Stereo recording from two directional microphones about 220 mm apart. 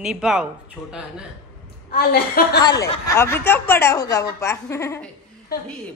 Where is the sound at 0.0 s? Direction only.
5° right (ahead or behind).